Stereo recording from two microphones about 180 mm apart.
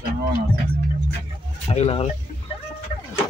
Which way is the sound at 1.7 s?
35° left (ahead or behind).